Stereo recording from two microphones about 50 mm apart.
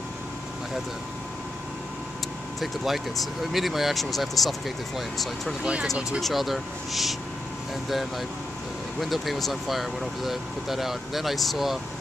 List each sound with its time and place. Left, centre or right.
2.6 s speech: centre
5.6 s speech: centre
6.2 s speech: centre
9.0 s speech: centre